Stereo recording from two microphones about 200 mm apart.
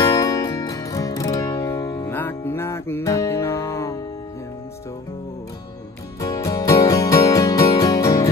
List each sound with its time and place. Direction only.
0.0 s music: 20° left (ahead or behind)
6.2 s music: 15° left (ahead or behind)